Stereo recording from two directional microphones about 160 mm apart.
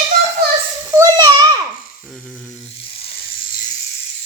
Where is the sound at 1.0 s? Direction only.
20° right (ahead or behind).